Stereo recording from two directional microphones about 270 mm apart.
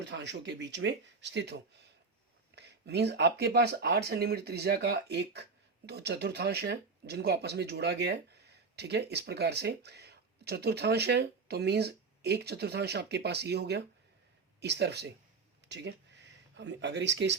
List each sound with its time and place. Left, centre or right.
0.0 s speech: right
16.6 s speech: right